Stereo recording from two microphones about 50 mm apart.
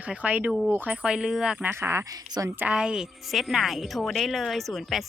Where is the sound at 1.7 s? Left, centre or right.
Right.